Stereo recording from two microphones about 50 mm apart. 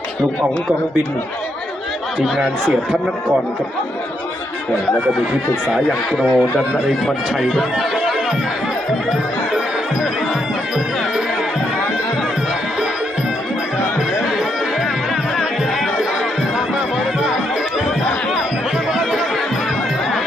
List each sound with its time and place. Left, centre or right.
2.1 s speech: centre
6.1 s speech: right
7.0 s speech: centre
7.9 s music: centre
9.5 s music: centre
14.3 s music: centre
17.2 s music: centre
18.9 s chatter: centre